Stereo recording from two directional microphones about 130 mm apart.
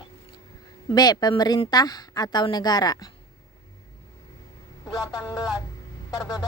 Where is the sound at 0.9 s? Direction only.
30° left (ahead or behind).